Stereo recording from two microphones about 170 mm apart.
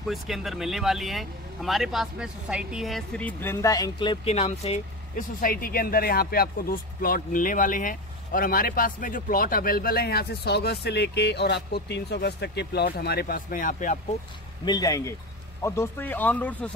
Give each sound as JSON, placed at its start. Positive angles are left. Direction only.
{"t": 0.0, "sound": "speech", "side_deg": 0}
{"t": 5.4, "sound": "speech", "side_deg": 60}
{"t": 14.6, "sound": "speech", "side_deg": 25}